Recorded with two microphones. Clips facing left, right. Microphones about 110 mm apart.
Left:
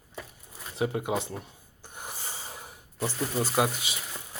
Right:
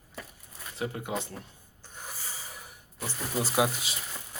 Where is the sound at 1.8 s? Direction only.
15° left (ahead or behind).